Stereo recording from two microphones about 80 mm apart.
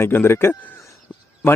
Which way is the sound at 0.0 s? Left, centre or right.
Left.